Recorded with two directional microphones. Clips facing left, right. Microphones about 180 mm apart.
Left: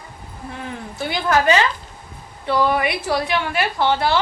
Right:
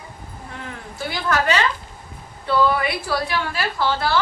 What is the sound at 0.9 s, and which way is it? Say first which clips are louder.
A woman's voice: left 3 dB; 20° left (ahead or behind).